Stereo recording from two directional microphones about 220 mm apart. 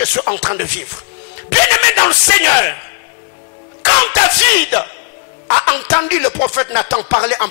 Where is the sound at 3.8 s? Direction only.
10° left (ahead or behind).